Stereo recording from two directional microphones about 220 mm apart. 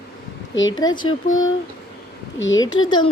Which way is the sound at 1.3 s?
65° left (ahead or behind).